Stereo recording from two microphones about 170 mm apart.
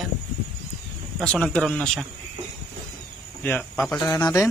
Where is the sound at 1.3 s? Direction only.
5° left (ahead or behind).